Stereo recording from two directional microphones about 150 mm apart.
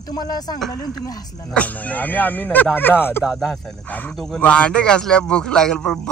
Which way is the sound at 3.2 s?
5° right (ahead or behind).